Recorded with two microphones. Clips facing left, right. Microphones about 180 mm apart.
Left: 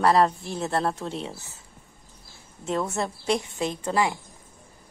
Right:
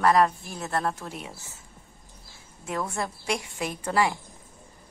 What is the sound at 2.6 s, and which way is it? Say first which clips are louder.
A woman's voice: left 4 dB; 25° left (ahead or behind).